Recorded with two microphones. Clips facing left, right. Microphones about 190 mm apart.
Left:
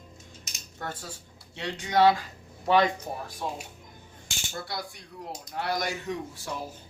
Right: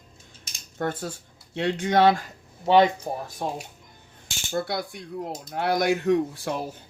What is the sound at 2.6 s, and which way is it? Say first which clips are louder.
Speech: right 5 dB; 25° right (ahead or behind).